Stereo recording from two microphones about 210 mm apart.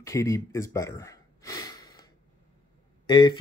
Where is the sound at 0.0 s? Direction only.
15° left (ahead or behind).